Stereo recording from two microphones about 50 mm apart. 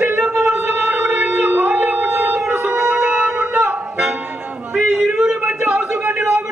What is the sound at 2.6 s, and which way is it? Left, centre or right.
Music, right.